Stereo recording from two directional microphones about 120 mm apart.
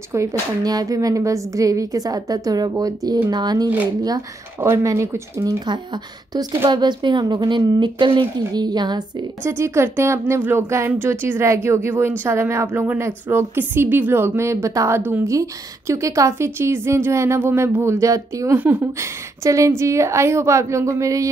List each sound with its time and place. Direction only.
0.1 s a woman's voice: 25° right (ahead or behind)
4.6 s a woman's voice: 20° right (ahead or behind)
6.3 s speech: 40° right (ahead or behind)
9.4 s a woman's voice: 20° right (ahead or behind)
18.6 s a woman's voice: 15° right (ahead or behind)